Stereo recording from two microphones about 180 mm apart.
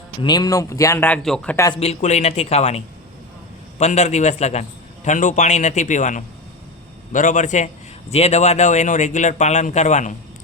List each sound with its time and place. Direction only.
0.2 s a man's voice: 20° left (ahead or behind); by 1.5 s 5° left (ahead or behind)
1.5 s a man's voice: 20° left (ahead or behind)
1.8 s a man's voice: 40° left (ahead or behind)